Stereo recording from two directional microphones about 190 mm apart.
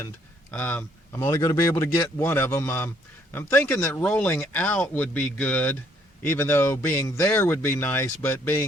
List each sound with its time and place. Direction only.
0.5 s speech: 10° left (ahead or behind)
1.2 s speech: 20° left (ahead or behind)